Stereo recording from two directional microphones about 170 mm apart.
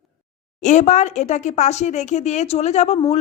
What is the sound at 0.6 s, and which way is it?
A woman's voice, 45° left (ahead or behind).